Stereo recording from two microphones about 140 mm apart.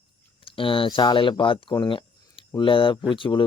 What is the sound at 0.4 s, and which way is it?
Speech, 40° left (ahead or behind).